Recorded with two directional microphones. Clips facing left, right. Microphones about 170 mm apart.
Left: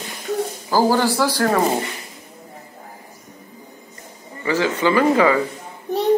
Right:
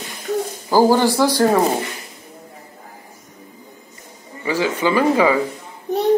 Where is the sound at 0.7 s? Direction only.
15° right (ahead or behind).